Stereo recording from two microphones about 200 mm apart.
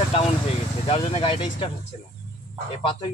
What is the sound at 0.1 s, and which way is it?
Speech, 30° left (ahead or behind).